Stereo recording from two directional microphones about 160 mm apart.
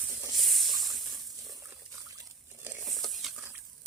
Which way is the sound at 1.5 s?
15° right (ahead or behind).